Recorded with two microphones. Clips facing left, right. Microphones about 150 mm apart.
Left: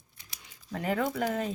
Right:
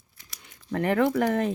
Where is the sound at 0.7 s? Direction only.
65° right (ahead or behind).